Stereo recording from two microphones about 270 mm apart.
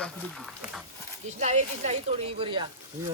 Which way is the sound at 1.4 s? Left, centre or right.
Right.